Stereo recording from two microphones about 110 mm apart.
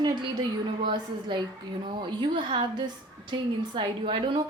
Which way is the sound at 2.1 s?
45° right (ahead or behind).